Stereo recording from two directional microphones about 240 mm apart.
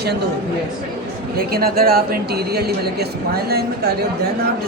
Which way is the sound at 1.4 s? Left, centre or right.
Right.